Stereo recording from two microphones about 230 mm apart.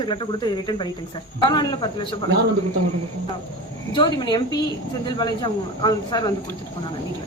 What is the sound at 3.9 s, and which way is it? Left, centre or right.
A woman's voice, centre.